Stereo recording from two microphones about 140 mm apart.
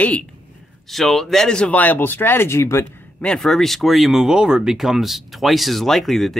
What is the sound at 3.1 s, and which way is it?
Speech, 5° left (ahead or behind).